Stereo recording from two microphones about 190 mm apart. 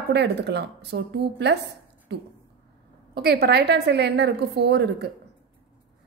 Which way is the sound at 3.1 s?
55° right (ahead or behind).